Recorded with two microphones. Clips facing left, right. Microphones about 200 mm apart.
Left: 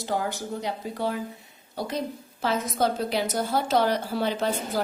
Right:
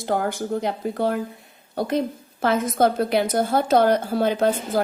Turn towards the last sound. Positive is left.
turn(degrees=-50)  # may be behind; listen again after turning